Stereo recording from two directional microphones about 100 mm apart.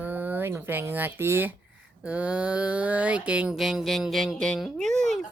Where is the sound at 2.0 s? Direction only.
15° right (ahead or behind).